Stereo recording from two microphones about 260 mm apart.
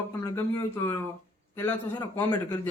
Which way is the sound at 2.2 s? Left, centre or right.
Centre.